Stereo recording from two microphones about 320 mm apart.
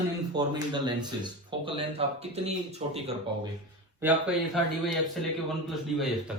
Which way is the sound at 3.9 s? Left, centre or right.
Centre.